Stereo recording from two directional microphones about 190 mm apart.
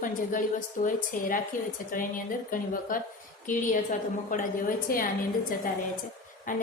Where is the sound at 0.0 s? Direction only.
45° left (ahead or behind).